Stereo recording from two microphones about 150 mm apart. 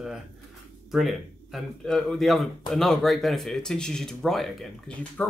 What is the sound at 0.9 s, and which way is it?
Speech, centre (ahead or behind).